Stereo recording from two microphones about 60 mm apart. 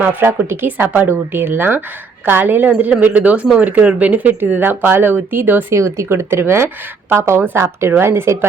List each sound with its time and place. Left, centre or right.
0.0 s speech: right
0.3 s speech: right
5.7 s a woman's voice: right